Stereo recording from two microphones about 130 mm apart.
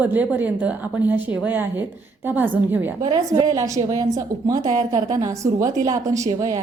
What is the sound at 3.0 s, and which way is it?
A woman's voice, 35° right (ahead or behind).